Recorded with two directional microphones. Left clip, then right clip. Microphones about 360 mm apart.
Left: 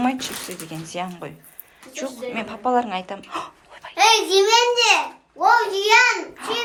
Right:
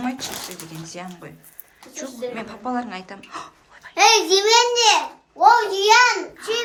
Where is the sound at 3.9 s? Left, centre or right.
Right.